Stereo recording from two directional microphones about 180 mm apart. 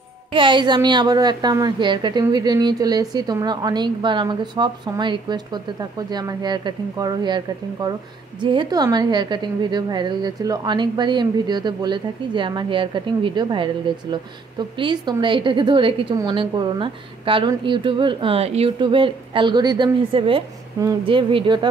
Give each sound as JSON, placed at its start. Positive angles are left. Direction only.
{"t": 0.3, "sound": "a woman's voice", "side_deg": -25}